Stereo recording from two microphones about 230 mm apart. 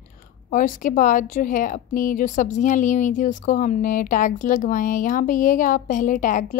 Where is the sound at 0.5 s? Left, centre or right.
Left.